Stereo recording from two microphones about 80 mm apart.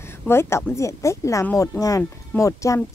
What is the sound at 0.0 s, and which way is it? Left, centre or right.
A woman's voice, left.